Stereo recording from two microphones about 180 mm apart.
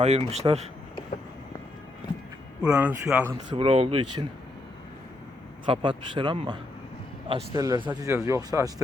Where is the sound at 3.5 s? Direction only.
30° right (ahead or behind).